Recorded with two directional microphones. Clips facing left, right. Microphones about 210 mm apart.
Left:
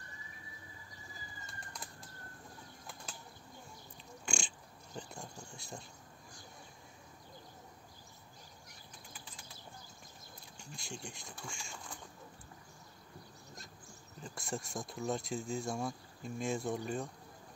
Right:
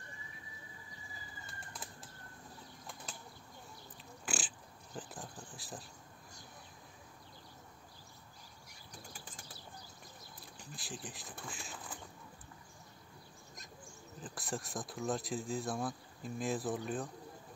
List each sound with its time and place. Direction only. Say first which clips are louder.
1.4 s bird flight: even; 5° right (ahead or behind)
4.3 s oink: even; 5° right (ahead or behind)
8.9 s bird flight: right 4 dB; 45° right (ahead or behind)
10.6 s speech: even; centre (ahead or behind)
14.2 s speech: even; centre (ahead or behind)